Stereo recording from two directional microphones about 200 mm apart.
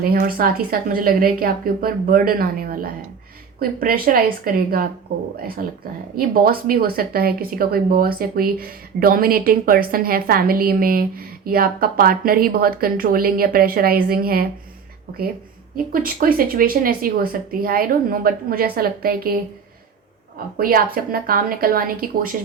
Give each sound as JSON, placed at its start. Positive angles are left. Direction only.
{"t": 0.0, "sound": "speech", "side_deg": -45}
{"t": 15.7, "sound": "speech", "side_deg": -45}
{"t": 20.6, "sound": "speech", "side_deg": -45}